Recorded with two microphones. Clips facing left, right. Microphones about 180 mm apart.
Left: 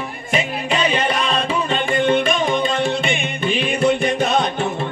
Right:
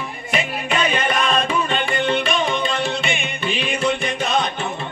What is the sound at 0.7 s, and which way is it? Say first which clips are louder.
Music: left 1 dB; 30° left (ahead or behind).